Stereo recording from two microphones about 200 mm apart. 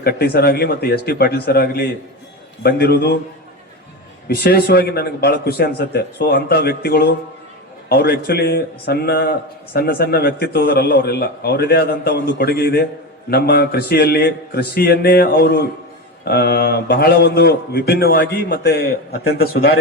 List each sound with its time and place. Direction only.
0.0 s a man's voice: 50° left (ahead or behind)
4.3 s a man's voice: 50° left (ahead or behind)